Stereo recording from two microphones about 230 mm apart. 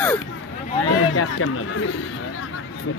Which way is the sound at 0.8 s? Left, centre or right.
Left.